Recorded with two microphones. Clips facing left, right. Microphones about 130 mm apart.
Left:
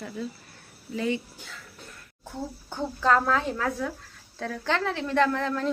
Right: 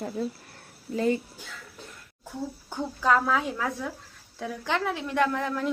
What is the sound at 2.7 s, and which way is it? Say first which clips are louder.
A woman's voice: left 1 dB; 5° right (ahead or behind).